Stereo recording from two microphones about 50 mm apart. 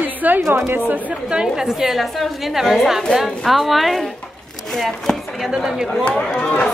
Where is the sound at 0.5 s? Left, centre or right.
Right.